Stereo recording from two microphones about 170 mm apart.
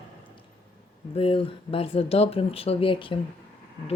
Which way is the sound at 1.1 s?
35° left (ahead or behind).